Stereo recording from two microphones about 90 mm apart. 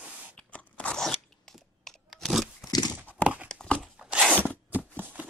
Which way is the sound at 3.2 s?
15° right (ahead or behind).